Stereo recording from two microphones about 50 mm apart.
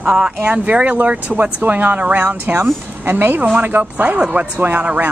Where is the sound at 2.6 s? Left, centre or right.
Right.